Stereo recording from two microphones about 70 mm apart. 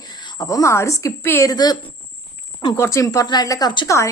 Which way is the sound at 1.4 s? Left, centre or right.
Left.